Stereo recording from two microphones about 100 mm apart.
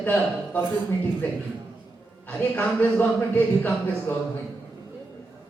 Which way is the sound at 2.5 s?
15° left (ahead or behind).